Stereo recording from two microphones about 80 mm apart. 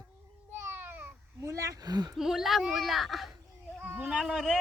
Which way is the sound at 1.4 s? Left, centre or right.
Right.